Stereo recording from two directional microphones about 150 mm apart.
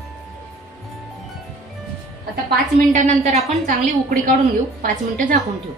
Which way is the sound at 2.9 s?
50° right (ahead or behind).